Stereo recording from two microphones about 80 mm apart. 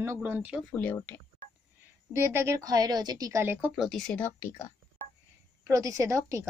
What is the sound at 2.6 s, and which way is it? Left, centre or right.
Speech, right.